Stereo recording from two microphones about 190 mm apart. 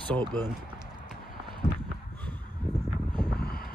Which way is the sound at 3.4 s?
50° left (ahead or behind).